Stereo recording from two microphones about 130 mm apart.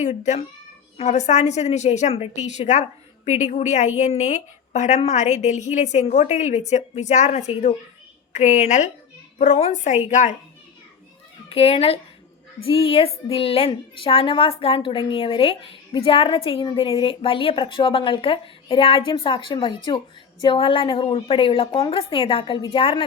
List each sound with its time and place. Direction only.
0.0 s a woman's voice: 65° left (ahead or behind)
11.4 s a woman's voice: 50° left (ahead or behind)